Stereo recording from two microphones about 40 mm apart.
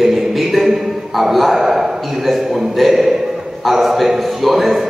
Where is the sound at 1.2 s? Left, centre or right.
Centre.